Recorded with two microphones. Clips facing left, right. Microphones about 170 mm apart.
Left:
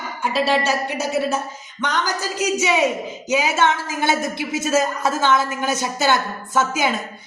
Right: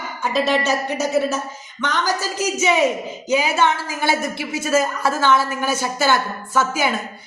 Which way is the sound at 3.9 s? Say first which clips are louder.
Even; 20° left (ahead or behind).